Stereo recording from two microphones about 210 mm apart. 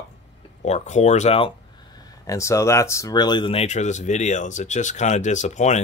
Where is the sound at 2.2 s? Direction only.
15° left (ahead or behind).